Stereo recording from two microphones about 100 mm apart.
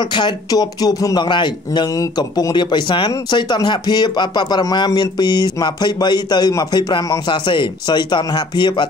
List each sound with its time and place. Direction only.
0.1 s speech: 45° left (ahead or behind)
2.0 s speech: 40° left (ahead or behind)